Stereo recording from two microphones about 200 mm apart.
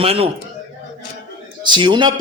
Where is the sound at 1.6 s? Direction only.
25° right (ahead or behind).